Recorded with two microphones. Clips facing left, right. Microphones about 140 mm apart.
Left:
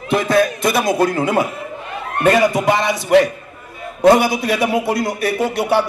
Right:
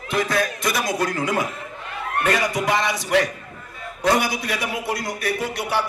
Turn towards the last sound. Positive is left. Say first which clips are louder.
# left 6 dB
turn(degrees=25)  # may be behind; listen again after turning